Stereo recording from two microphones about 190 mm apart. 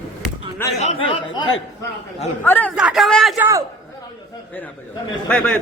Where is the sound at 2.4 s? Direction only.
10° left (ahead or behind).